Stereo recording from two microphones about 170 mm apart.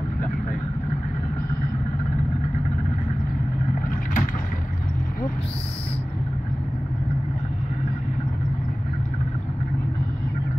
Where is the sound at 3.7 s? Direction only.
50° left (ahead or behind).